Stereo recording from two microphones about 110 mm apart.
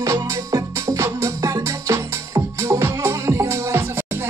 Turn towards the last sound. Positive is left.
turn(degrees=-25)  # may be behind; listen again after turning